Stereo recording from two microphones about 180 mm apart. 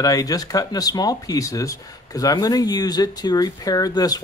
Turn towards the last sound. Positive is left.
turn(degrees=20)  # may be behind; listen again after turning